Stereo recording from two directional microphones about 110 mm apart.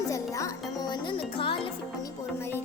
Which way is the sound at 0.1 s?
30° left (ahead or behind).